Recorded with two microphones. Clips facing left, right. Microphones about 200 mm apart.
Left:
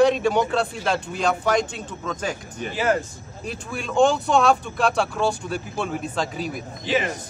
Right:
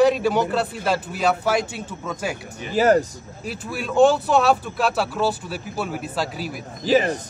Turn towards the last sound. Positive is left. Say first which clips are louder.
# right 5 dB
turn(degrees=-40)  # may be behind; listen again after turning